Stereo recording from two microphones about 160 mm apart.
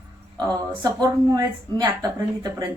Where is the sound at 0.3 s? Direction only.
25° right (ahead or behind).